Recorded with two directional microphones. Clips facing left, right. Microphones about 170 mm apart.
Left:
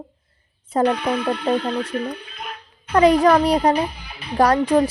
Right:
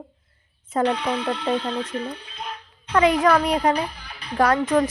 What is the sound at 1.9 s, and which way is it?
Speech, 25° right (ahead or behind).